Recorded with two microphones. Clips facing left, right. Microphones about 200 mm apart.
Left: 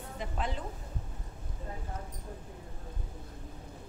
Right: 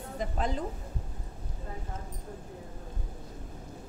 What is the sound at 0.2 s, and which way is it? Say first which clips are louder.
Speech: right 4 dB; 40° right (ahead or behind).